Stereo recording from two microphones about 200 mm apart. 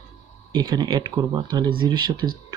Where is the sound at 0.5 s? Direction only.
20° right (ahead or behind).